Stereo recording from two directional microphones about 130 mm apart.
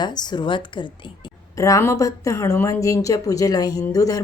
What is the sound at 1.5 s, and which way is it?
A woman's voice, 25° left (ahead or behind).